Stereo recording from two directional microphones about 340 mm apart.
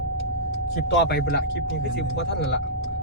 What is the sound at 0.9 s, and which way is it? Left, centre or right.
Speech, left.